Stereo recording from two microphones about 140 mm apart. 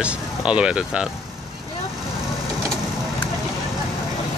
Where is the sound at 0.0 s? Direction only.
5° right (ahead or behind).